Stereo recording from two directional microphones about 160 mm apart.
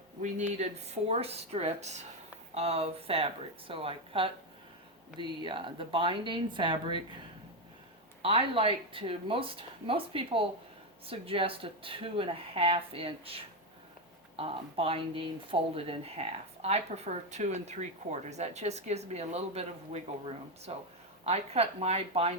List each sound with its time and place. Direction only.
0.2 s speech: 50° right (ahead or behind); by 7.0 s 30° right (ahead or behind)
8.2 s speech: 35° right (ahead or behind)